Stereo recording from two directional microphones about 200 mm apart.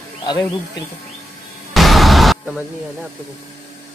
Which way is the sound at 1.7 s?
Centre (ahead or behind).